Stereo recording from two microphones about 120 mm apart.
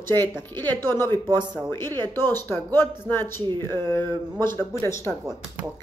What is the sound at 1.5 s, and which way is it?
Speech, 20° left (ahead or behind).